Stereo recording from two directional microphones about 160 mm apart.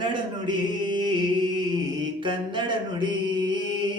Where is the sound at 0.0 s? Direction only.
30° right (ahead or behind).